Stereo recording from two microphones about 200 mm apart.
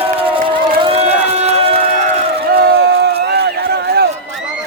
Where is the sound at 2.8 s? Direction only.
55° right (ahead or behind).